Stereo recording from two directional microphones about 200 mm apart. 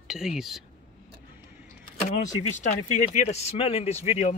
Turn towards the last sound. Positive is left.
turn(degrees=35)  # may be behind; listen again after turning